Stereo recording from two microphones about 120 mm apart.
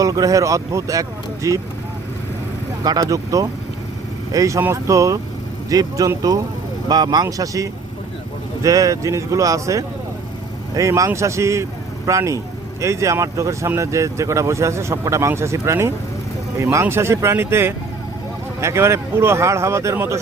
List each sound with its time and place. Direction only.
0.0 s speech: 30° right (ahead or behind)
2.8 s speech: 30° right (ahead or behind)